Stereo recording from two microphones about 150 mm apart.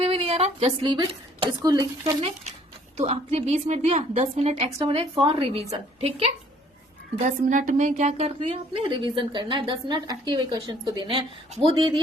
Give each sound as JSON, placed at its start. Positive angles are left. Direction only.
{"t": 0.0, "sound": "a sound", "side_deg": -40}
{"t": 0.9, "sound": "speech", "side_deg": -30}
{"t": 2.2, "sound": "a woman's voice", "side_deg": -45}
{"t": 7.2, "sound": "a woman's voice", "side_deg": -60}